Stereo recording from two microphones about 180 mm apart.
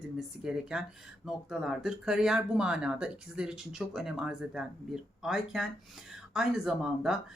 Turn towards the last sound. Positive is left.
turn(degrees=-5)  # may be behind; listen again after turning